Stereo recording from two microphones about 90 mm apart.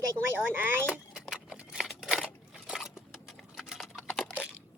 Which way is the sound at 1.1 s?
5° right (ahead or behind).